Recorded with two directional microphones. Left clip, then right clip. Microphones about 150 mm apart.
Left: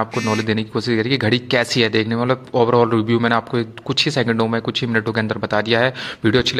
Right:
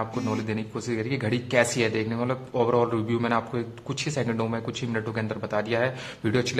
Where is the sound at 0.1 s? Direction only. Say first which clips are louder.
Left 10 dB; 40° left (ahead or behind).